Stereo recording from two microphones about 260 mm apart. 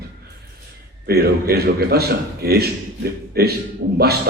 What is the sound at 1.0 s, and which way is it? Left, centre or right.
A man's voice, right.